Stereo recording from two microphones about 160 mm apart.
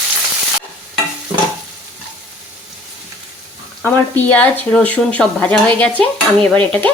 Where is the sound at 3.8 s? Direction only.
10° left (ahead or behind).